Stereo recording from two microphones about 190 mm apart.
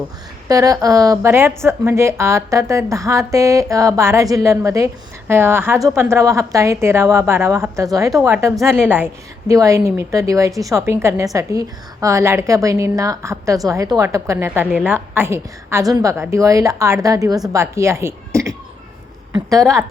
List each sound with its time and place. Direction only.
0.4 s a woman's voice: 20° right (ahead or behind)